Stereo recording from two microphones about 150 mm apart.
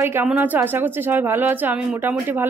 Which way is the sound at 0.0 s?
15° right (ahead or behind).